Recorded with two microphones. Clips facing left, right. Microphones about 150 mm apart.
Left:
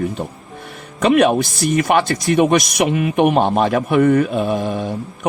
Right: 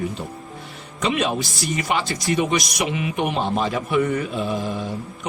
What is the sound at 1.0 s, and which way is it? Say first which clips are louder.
A man's voice: left 9 dB; 55° left (ahead or behind).